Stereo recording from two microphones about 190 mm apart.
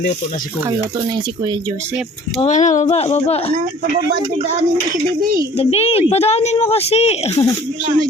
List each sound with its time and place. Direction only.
2.4 s speech: 40° left (ahead or behind)
5.2 s a child's voice: 45° right (ahead or behind)
5.5 s speech: 30° left (ahead or behind)